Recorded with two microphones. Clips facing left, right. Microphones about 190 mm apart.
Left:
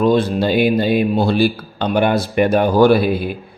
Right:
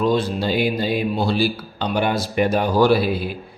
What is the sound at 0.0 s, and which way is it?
A man's voice, 55° left (ahead or behind).